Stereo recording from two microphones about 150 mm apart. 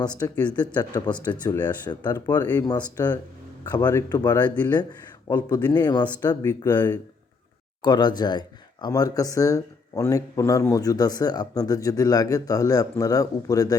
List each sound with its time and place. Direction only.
0.3 s speech: 10° left (ahead or behind)
0.8 s speech: 25° left (ahead or behind)
7.8 s speech: 25° left (ahead or behind)